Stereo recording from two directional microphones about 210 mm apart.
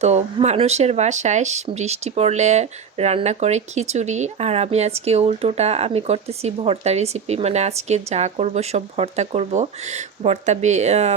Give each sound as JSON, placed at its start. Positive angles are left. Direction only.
{"t": 0.0, "sound": "speech", "side_deg": -30}